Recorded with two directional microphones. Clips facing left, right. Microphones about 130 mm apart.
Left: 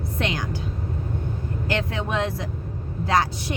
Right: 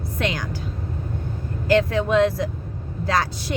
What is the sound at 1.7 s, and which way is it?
Speech, 20° left (ahead or behind).